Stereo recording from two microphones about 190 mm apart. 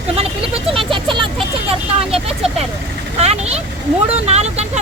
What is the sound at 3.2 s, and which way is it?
Speech, 35° right (ahead or behind).